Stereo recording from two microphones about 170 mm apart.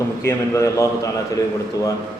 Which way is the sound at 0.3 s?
15° left (ahead or behind).